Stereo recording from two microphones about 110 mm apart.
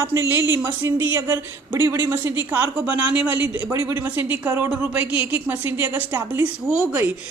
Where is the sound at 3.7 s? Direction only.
25° right (ahead or behind).